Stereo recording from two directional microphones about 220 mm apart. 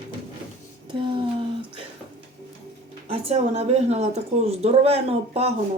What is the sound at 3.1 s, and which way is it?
A woman's voice, 25° right (ahead or behind).